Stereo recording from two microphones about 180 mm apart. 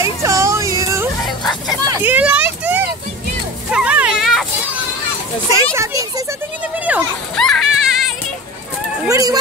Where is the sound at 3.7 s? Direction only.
5° right (ahead or behind).